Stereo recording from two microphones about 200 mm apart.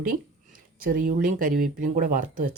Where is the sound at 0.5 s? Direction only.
45° right (ahead or behind).